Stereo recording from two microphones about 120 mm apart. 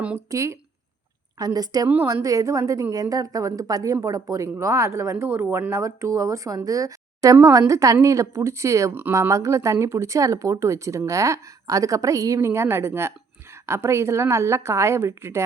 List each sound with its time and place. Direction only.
0.3 s a woman's voice: 25° right (ahead or behind)
1.9 s speech: 20° right (ahead or behind)